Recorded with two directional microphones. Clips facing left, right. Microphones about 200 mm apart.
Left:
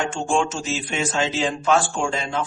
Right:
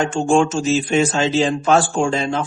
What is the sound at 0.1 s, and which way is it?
A man's voice, 45° right (ahead or behind).